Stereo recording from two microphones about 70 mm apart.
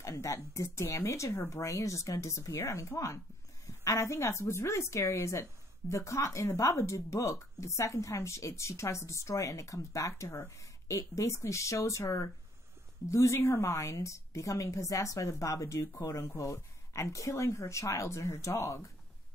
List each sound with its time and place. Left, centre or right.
0.0 s a woman's voice: left